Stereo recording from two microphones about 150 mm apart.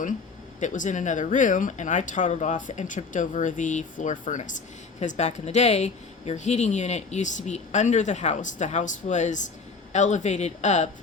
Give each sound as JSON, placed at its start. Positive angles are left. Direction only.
{"t": 0.6, "sound": "speech", "side_deg": 55}